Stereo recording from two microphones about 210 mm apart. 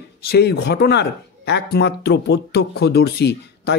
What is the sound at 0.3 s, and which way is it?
Speech, 50° left (ahead or behind).